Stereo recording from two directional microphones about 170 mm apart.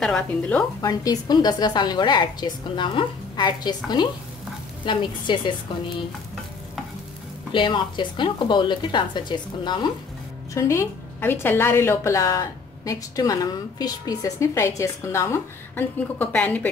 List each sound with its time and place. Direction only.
0.0 s speech: 5° left (ahead or behind)
0.7 s a woman's voice: 20° left (ahead or behind)
7.5 s a woman's voice: 30° left (ahead or behind); by 16.6 s 10° left (ahead or behind)